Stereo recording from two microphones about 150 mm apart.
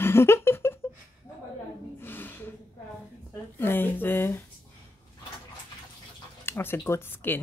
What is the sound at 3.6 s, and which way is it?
Speech, 15° left (ahead or behind).